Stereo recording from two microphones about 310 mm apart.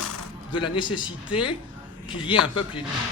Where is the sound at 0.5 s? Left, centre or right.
Centre.